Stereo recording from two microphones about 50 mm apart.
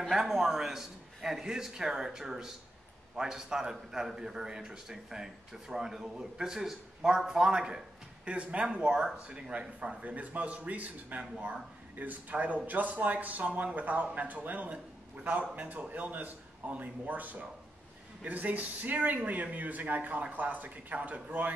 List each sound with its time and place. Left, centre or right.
0.1 s a man's voice: centre; by 21.5 s right